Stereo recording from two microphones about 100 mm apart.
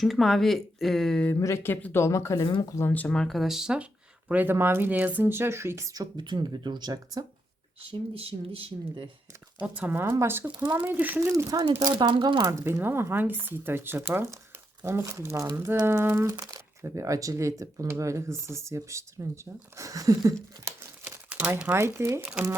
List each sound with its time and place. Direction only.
0.0 s speech: centre (ahead or behind)
1.4 s speech: 25° left (ahead or behind)
2.7 s speech: 20° left (ahead or behind)
3.2 s speech: centre (ahead or behind)
4.3 s speech: 20° right (ahead or behind); by 7.3 s 40° right (ahead or behind)
7.8 s speech: 70° right (ahead or behind)
9.6 s speech: 15° right (ahead or behind)
11.8 s speech: 45° right (ahead or behind)
12.6 s speech: 25° right (ahead or behind)
16.4 s speech: 35° right (ahead or behind)
21.0 s speech: 20° right (ahead or behind)